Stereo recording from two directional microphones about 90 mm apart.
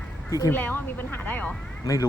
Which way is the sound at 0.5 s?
20° left (ahead or behind).